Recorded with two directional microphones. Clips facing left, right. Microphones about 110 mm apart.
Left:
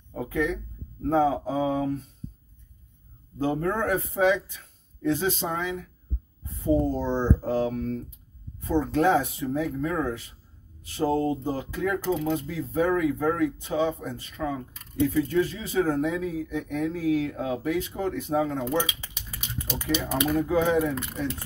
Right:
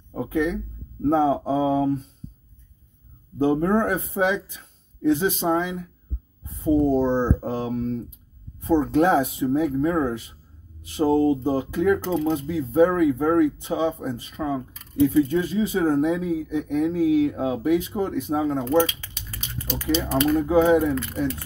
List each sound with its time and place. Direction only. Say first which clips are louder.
0.1 s speech: right 3 dB; 20° right (ahead or behind)
3.3 s speech: right 6 dB; 20° right (ahead or behind)
18.9 s typing: right 1 dB; 10° left (ahead or behind)
19.8 s speech: right 5 dB; 15° left (ahead or behind)
20.3 s speech: right 5 dB; 20° right (ahead or behind)
20.9 s speech: right 5 dB; 20° left (ahead or behind)